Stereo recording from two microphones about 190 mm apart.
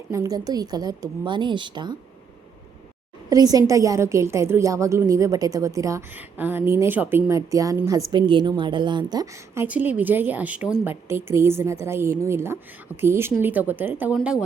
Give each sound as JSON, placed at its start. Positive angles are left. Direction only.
{"t": 0.1, "sound": "a woman's voice", "side_deg": -20}
{"t": 3.2, "sound": "a woman's voice", "side_deg": -20}